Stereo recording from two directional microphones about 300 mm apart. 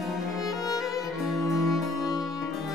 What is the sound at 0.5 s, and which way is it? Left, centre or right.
Music, centre.